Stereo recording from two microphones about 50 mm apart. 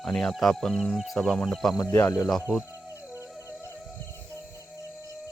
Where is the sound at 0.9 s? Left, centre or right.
Centre.